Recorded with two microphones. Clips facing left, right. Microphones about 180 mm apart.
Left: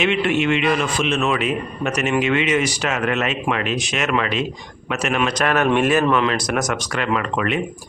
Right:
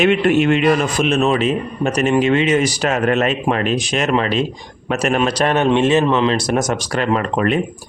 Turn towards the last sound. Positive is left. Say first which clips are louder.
# right 4 dB
turn(degrees=-40)  # may be behind; listen again after turning